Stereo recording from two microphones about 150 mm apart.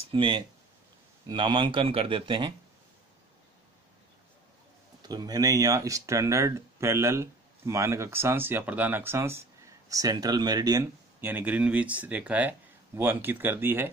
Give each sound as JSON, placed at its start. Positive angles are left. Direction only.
{"t": 0.1, "sound": "speech", "side_deg": -35}
{"t": 5.0, "sound": "speech", "side_deg": -25}